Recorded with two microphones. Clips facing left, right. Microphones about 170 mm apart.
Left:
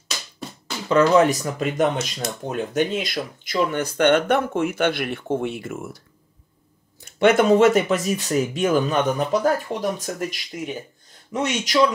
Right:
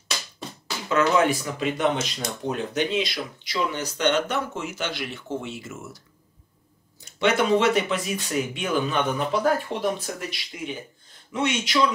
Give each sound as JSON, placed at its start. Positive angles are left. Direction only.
{"t": 0.8, "sound": "speech", "side_deg": 40}
{"t": 7.1, "sound": "speech", "side_deg": 50}